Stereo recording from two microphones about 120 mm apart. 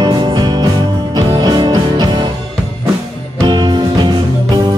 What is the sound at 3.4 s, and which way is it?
Music, 40° right (ahead or behind).